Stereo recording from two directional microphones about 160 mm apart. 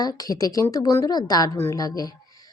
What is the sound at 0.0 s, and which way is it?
Speech, 25° left (ahead or behind).